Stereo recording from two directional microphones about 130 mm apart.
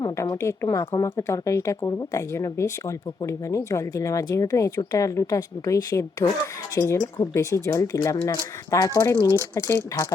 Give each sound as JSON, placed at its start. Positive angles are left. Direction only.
{"t": 0.0, "sound": "a woman's voice", "side_deg": 25}